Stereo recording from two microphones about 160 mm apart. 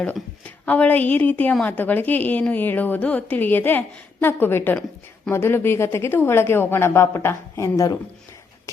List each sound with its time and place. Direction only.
0.6 s a woman's voice: 10° left (ahead or behind)